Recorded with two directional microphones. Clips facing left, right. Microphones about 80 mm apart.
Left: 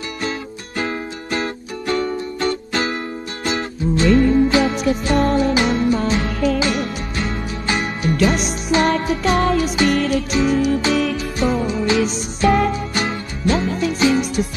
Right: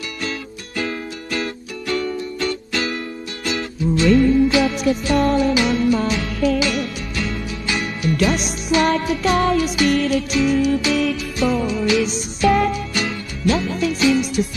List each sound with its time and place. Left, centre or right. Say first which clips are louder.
0.8 s music: left 1 dB; left
9.9 s music: even; left